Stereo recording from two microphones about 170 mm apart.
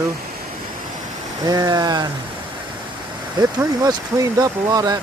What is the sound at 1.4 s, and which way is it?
Speech, 20° right (ahead or behind).